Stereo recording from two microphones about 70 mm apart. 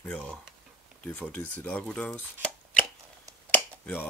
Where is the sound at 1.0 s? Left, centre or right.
Left.